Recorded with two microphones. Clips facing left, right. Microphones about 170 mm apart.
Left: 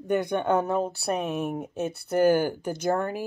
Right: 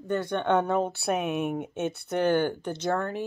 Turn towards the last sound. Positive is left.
turn(degrees=10)  # may be behind; listen again after turning